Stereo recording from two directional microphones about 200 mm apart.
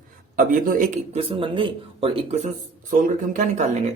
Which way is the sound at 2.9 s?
40° right (ahead or behind).